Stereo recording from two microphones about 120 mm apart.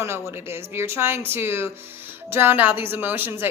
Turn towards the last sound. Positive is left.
turn(degrees=-20)  # may be behind; listen again after turning